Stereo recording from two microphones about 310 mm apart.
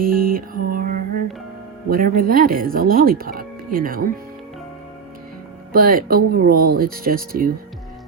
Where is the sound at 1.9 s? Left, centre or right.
Right.